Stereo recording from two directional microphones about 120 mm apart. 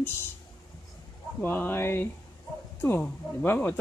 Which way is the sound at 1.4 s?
15° left (ahead or behind).